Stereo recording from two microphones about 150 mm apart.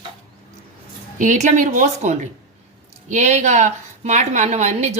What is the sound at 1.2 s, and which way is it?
A woman's voice, 55° right (ahead or behind).